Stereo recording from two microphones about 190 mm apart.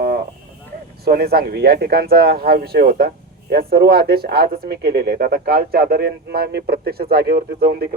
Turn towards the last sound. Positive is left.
turn(degrees=-55)  # may be behind; listen again after turning